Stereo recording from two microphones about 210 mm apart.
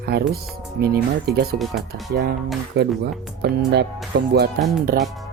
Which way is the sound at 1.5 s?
Centre (ahead or behind).